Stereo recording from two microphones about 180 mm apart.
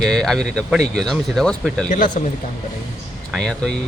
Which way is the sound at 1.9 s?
45° left (ahead or behind).